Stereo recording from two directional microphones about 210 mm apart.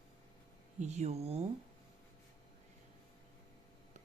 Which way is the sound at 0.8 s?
35° right (ahead or behind).